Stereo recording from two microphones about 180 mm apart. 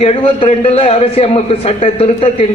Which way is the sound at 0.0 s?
30° left (ahead or behind).